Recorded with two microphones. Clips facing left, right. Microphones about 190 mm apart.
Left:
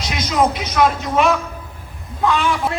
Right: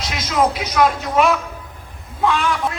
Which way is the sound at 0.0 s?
Centre (ahead or behind).